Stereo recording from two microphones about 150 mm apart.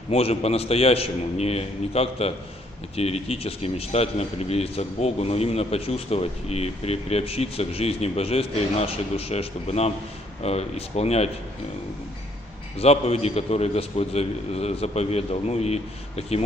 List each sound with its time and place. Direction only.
0.1 s a man's voice: 45° left (ahead or behind)
12.7 s a man's voice: 45° left (ahead or behind)